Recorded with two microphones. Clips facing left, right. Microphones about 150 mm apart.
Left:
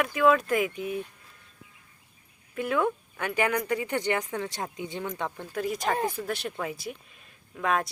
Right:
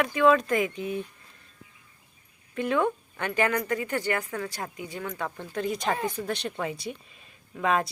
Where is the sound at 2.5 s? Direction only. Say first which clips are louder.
Right 1 dB; 5° left (ahead or behind).